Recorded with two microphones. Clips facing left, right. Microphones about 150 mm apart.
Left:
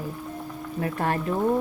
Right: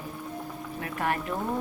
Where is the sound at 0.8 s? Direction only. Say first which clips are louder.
Left 4 dB; 35° left (ahead or behind).